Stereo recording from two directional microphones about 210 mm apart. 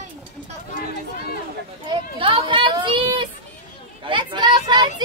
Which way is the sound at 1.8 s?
25° right (ahead or behind).